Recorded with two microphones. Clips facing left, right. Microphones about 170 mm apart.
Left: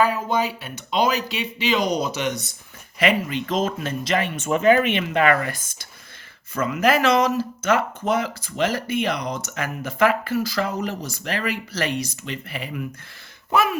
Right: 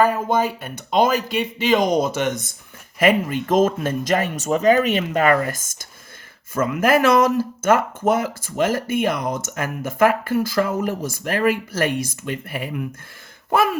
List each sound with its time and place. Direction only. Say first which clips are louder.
0.0 s speech: right 3 dB; 50° right (ahead or behind)